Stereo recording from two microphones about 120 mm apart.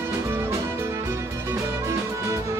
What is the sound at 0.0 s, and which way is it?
Music, 20° right (ahead or behind).